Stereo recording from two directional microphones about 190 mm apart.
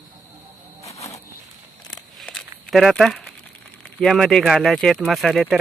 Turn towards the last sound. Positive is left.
turn(degrees=0)  # may be behind; listen again after turning